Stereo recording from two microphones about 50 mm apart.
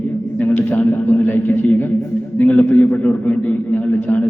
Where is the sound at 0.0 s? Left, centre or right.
Left.